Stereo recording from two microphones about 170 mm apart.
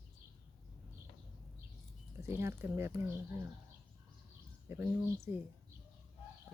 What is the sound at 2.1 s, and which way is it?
Speech, 15° right (ahead or behind).